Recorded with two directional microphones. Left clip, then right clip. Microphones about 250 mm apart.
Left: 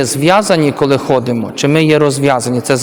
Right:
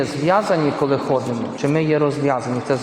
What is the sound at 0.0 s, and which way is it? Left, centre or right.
A man's voice, left.